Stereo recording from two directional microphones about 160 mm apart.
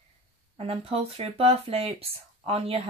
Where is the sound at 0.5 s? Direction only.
35° right (ahead or behind).